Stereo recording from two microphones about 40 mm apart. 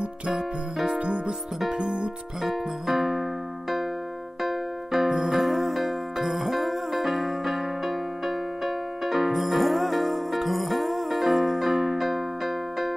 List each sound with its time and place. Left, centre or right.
0.8 s music: right
2.4 s music: centre
4.4 s music: centre